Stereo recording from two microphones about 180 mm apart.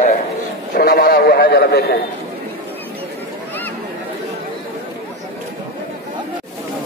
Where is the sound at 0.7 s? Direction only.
55° left (ahead or behind).